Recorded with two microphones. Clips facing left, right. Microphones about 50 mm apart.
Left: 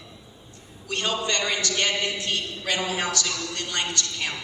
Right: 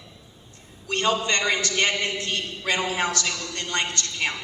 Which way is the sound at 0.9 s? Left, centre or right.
Right.